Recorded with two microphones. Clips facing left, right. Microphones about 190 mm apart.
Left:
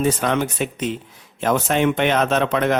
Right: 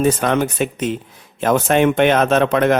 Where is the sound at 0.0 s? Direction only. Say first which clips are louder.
Right 3 dB; 50° right (ahead or behind).